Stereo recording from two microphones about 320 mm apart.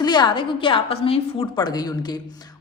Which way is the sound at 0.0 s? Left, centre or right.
Centre.